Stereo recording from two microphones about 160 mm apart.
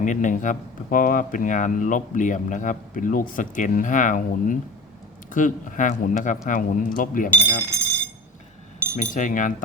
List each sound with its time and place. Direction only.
0.0 s speech: 50° left (ahead or behind)
9.0 s speech: 55° left (ahead or behind)